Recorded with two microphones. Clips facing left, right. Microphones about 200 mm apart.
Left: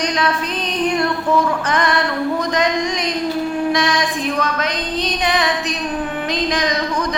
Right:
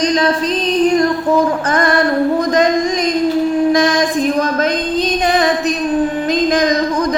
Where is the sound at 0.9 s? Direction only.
40° right (ahead or behind).